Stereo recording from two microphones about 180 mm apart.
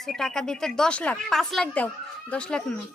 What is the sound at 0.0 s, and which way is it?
A woman's voice, 5° left (ahead or behind).